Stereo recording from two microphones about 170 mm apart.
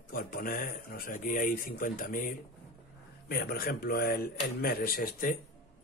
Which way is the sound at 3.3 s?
65° left (ahead or behind).